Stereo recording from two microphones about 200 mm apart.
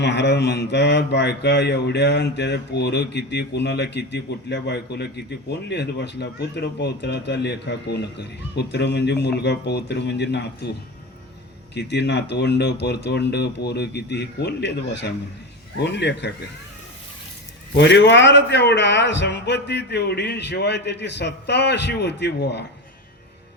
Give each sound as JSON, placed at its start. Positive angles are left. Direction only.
{"t": 0.0, "sound": "speech", "side_deg": 60}
{"t": 11.7, "sound": "speech", "side_deg": 60}
{"t": 17.7, "sound": "speech", "side_deg": 60}